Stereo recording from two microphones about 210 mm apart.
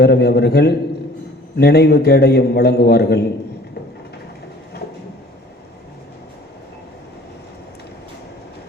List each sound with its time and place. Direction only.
0.0 s a man's voice: 50° left (ahead or behind)